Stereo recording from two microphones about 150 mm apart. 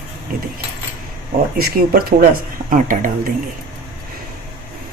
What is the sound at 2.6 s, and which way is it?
Speech, 60° right (ahead or behind).